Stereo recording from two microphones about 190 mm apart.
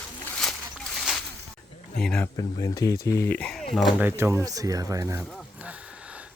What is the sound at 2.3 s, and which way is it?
Speech, 20° left (ahead or behind).